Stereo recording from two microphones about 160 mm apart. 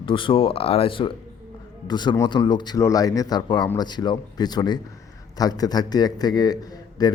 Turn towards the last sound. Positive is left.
turn(degrees=25)  # may be behind; listen again after turning